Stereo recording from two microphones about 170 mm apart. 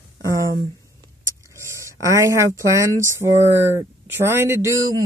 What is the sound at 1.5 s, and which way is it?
A man's voice, 15° right (ahead or behind).